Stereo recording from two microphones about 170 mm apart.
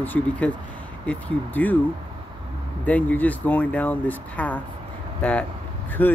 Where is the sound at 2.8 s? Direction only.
10° left (ahead or behind).